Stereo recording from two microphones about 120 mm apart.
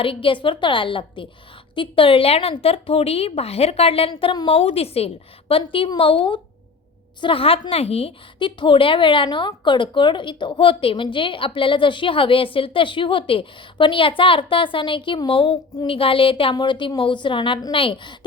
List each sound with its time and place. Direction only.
0.0 s a woman's voice: 45° left (ahead or behind)
4.1 s a woman's voice: 40° left (ahead or behind)